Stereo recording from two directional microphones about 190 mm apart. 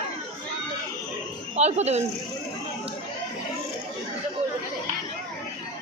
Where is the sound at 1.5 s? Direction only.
35° right (ahead or behind).